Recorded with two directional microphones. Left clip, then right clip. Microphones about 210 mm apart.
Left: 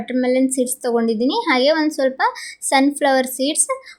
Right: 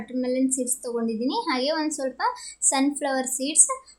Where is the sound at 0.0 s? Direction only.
25° left (ahead or behind).